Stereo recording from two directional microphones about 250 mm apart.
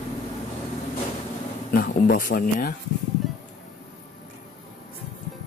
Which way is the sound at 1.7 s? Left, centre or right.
Left.